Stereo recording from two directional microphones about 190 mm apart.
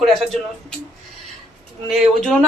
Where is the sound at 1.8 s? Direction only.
Centre (ahead or behind).